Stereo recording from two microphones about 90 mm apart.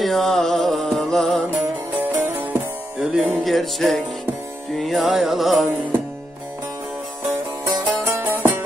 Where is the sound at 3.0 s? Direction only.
5° right (ahead or behind).